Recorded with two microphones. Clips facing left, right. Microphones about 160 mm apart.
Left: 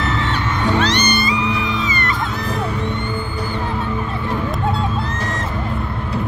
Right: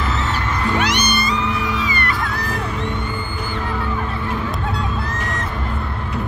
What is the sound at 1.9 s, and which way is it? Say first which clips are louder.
Music: left 1 dB; 20° left (ahead or behind).